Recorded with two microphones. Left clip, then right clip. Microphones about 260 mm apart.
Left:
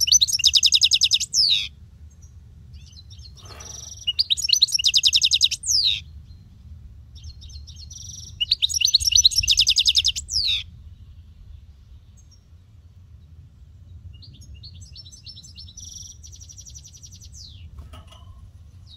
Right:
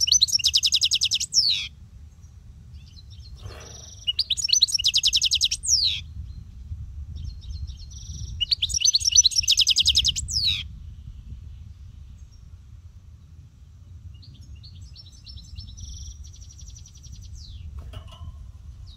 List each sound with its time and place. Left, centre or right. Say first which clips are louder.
0.0 s chirp: left 2 dB; centre
2.8 s bird: left 4 dB; left
4.0 s chirp: left 3 dB; centre
7.2 s chirp: left 4 dB; left
8.7 s bird: even; centre
14.2 s chirp: left 5 dB; left